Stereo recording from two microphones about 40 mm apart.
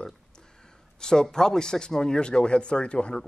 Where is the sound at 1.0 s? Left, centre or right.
Centre.